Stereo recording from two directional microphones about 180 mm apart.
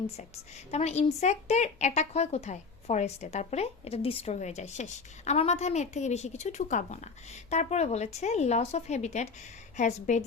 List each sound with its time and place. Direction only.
0.7 s speech: 35° left (ahead or behind)